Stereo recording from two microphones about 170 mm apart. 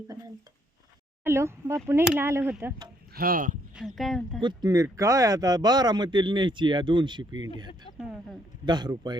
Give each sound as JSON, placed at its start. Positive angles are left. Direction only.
{"t": 1.2, "sound": "speech", "side_deg": -15}
{"t": 3.2, "sound": "speech", "side_deg": -55}
{"t": 3.8, "sound": "speech", "side_deg": 0}
{"t": 4.4, "sound": "speech", "side_deg": -25}
{"t": 7.9, "sound": "speech", "side_deg": -5}
{"t": 8.6, "sound": "speech", "side_deg": -25}